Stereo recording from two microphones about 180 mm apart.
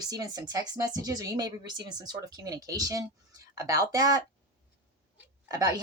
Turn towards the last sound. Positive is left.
turn(degrees=-20)  # may be behind; listen again after turning